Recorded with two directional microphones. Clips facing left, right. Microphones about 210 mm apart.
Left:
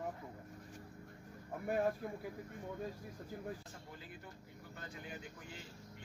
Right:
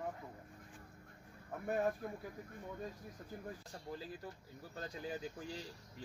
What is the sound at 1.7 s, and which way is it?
Speech, 5° left (ahead or behind).